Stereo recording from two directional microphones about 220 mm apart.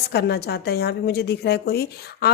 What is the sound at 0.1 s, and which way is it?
Speech, 50° left (ahead or behind).